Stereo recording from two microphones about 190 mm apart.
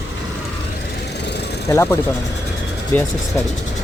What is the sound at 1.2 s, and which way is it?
Vehicle, 60° left (ahead or behind).